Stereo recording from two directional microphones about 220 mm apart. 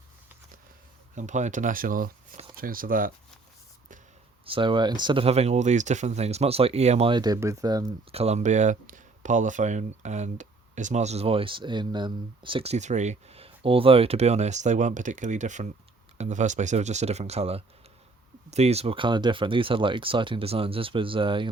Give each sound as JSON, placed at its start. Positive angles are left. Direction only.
{"t": 1.1, "sound": "speech", "side_deg": -35}
{"t": 4.4, "sound": "speech", "side_deg": -25}